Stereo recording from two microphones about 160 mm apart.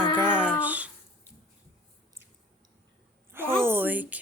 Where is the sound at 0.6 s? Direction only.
10° right (ahead or behind).